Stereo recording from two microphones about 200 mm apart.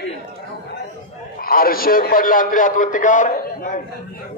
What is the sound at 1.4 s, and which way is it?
A man's voice, 45° left (ahead or behind).